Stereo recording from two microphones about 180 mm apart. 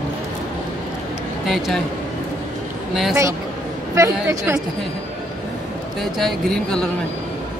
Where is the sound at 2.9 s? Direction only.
Centre (ahead or behind).